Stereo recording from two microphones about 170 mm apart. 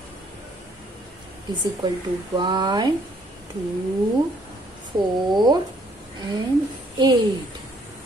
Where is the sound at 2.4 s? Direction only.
25° right (ahead or behind).